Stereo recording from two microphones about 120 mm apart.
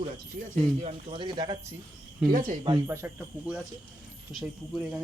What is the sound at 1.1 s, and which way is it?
Speech, 40° right (ahead or behind).